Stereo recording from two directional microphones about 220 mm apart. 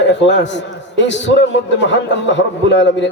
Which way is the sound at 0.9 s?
55° left (ahead or behind).